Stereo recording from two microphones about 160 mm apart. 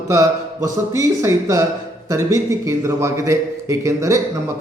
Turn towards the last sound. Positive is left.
turn(degrees=-20)  # may be behind; listen again after turning